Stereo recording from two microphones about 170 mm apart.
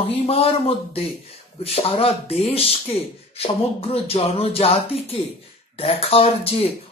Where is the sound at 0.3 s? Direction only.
35° left (ahead or behind).